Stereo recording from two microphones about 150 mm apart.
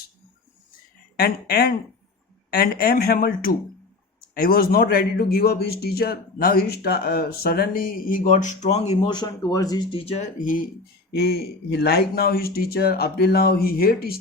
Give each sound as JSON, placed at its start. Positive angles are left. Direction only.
{"t": 1.1, "sound": "a man's voice", "side_deg": 90}
{"t": 9.0, "sound": "speech", "side_deg": 30}
{"t": 10.1, "sound": "speech", "side_deg": 55}
{"t": 11.1, "sound": "a man's voice", "side_deg": 90}